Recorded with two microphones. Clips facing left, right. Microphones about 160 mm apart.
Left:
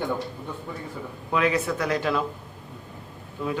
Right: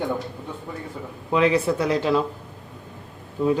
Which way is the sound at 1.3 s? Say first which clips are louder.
Right 4 dB; 30° right (ahead or behind).